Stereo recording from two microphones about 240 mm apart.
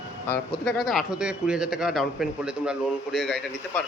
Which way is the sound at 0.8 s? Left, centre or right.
Centre.